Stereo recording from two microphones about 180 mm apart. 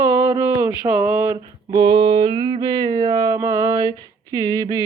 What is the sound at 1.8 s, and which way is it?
Mantra, 25° right (ahead or behind).